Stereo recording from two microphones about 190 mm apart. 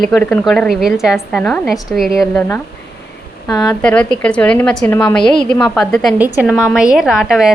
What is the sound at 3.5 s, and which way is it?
Speech, 20° left (ahead or behind).